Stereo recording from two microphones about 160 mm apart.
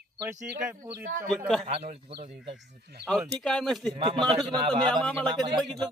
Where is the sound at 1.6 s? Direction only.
45° right (ahead or behind).